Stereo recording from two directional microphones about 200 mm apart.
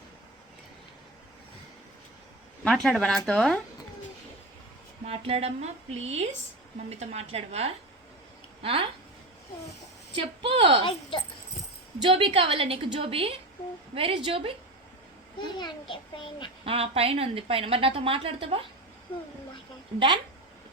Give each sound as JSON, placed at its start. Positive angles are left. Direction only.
{"t": 2.6, "sound": "speech", "side_deg": 0}
{"t": 5.0, "sound": "a woman's voice", "side_deg": -30}
{"t": 10.2, "sound": "a woman's voice", "side_deg": -25}
{"t": 12.0, "sound": "a woman's voice", "side_deg": -30}
{"t": 15.4, "sound": "a child's voice", "side_deg": 20}
{"t": 16.6, "sound": "a woman's voice", "side_deg": -30}